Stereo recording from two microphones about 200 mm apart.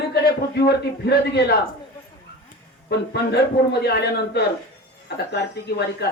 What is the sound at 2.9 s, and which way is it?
Speech, 55° left (ahead or behind).